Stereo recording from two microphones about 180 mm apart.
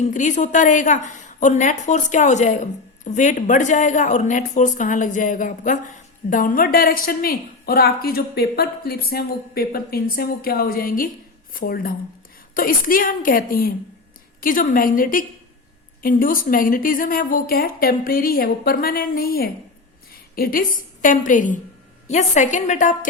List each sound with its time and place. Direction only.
0.0 s a woman's voice: 45° left (ahead or behind)